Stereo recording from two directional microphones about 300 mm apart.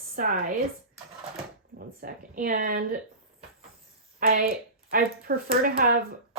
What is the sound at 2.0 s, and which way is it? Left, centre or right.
Speech, right.